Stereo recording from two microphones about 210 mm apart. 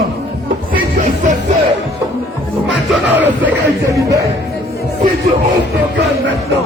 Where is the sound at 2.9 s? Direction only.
10° right (ahead or behind).